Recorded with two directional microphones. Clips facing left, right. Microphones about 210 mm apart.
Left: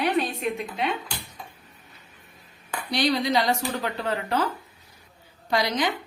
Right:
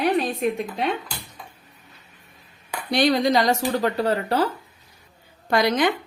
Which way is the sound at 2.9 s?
50° right (ahead or behind).